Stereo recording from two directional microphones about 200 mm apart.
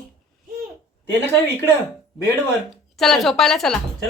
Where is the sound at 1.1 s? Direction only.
10° left (ahead or behind).